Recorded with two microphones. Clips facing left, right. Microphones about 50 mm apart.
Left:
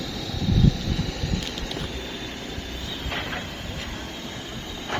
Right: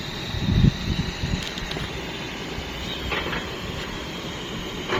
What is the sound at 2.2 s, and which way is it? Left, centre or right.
Vehicle, right.